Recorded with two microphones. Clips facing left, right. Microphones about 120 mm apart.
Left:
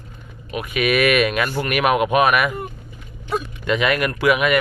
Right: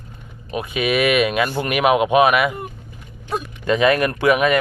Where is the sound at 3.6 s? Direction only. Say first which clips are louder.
Right 4 dB; 35° right (ahead or behind).